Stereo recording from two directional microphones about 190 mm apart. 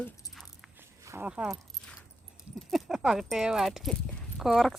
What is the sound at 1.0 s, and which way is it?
Speech, 15° right (ahead or behind).